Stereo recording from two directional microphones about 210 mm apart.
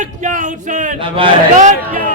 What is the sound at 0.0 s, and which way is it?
A man's voice, 35° right (ahead or behind).